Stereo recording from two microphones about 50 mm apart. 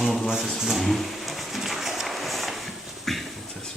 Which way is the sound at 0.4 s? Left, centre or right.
Centre.